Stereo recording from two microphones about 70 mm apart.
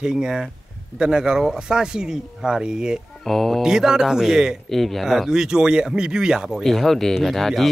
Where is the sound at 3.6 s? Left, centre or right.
Centre.